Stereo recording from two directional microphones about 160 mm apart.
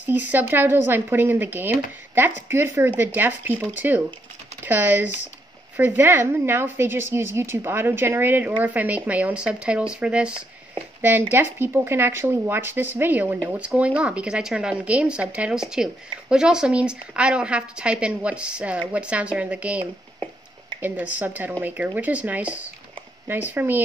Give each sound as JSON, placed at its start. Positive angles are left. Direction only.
{"t": 0.0, "sound": "speech", "side_deg": -10}